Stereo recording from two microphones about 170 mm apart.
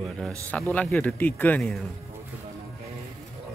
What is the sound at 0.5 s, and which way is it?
Speech, 10° left (ahead or behind).